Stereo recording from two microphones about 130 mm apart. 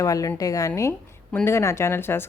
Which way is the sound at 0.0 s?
25° left (ahead or behind).